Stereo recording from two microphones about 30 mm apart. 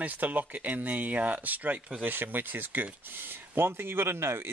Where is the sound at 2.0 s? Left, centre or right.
Right.